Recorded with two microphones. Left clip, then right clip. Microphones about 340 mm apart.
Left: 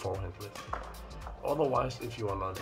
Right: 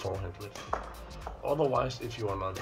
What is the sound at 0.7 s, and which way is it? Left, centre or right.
Music, right.